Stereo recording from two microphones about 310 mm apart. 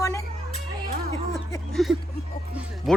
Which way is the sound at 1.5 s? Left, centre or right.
Centre.